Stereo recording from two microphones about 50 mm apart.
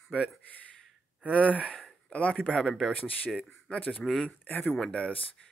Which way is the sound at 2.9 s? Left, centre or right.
Left.